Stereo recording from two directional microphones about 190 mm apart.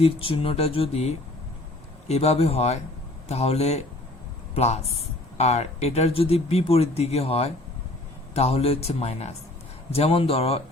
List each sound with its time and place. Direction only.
0.0 s speech: 30° left (ahead or behind)